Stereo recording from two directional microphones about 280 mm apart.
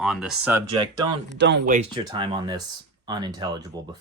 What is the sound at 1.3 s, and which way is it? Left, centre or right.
Speech, right.